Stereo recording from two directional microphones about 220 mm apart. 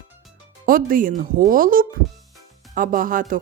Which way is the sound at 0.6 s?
40° right (ahead or behind).